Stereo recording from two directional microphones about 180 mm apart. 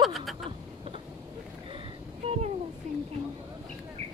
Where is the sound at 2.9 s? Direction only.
40° right (ahead or behind).